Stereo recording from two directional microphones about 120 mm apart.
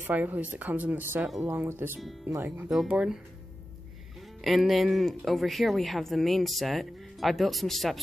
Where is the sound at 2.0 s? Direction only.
Centre (ahead or behind).